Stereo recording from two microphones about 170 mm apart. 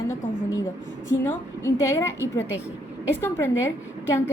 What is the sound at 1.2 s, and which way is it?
Speech, 15° left (ahead or behind).